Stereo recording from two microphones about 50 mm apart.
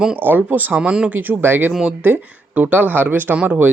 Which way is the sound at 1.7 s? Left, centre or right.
Centre.